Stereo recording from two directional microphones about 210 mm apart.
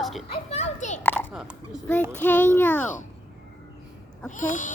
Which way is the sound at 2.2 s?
10° left (ahead or behind).